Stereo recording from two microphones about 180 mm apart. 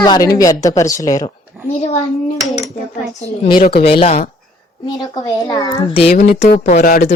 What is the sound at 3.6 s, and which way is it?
Speech, 60° left (ahead or behind).